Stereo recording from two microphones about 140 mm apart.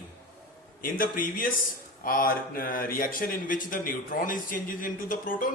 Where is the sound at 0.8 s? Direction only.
80° left.